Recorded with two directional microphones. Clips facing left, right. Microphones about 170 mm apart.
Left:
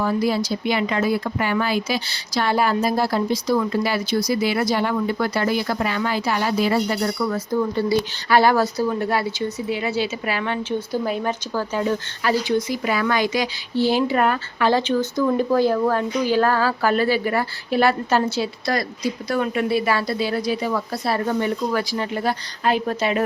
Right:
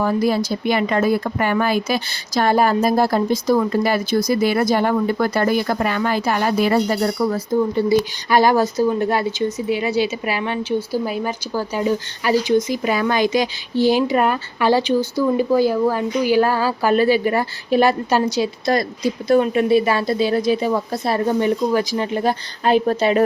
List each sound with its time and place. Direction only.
0.0 s speech: 50° right (ahead or behind)
6.8 s speech: 35° right (ahead or behind)